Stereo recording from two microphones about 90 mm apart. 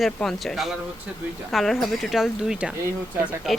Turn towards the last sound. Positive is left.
turn(degrees=0)  # may be behind; listen again after turning